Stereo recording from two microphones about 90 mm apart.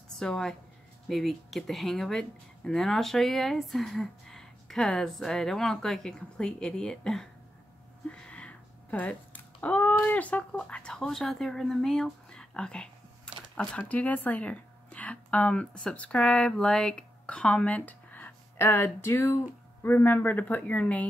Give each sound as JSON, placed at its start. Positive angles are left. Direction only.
{"t": 0.2, "sound": "speech", "side_deg": 5}
{"t": 8.1, "sound": "cat", "side_deg": 15}
{"t": 9.9, "sound": "speech", "side_deg": 20}